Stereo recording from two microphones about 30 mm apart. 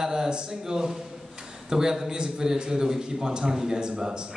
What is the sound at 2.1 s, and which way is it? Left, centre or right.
A man's voice, right.